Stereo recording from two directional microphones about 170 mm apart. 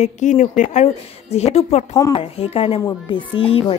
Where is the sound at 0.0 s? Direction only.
45° left (ahead or behind).